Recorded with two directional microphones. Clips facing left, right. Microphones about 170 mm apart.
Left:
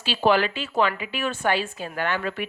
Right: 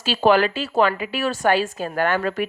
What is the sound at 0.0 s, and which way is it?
Speech, 45° right (ahead or behind).